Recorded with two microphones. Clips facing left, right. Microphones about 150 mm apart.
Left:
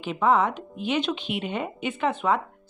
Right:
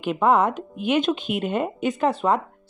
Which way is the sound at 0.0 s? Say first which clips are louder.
Right 3 dB; 50° right (ahead or behind).